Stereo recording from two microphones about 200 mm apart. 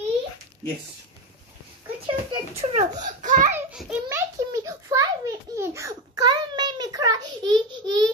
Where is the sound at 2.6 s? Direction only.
35° right (ahead or behind).